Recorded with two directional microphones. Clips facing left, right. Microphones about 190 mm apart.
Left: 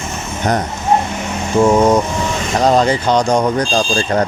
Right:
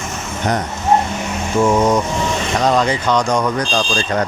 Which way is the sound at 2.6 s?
35° left (ahead or behind).